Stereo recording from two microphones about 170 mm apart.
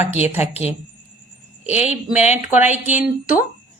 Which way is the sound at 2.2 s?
40° left (ahead or behind).